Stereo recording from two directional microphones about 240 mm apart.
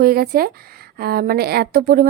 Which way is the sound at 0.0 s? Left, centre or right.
Right.